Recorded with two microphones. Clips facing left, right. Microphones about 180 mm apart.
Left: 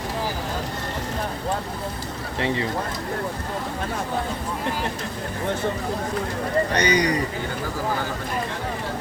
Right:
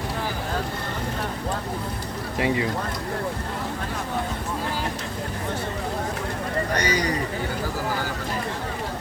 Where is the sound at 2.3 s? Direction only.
15° right (ahead or behind).